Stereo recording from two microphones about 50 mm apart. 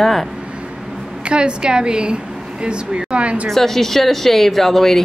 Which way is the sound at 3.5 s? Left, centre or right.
Centre.